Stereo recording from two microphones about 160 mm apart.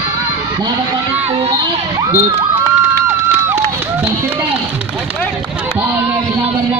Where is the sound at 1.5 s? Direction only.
20° right (ahead or behind).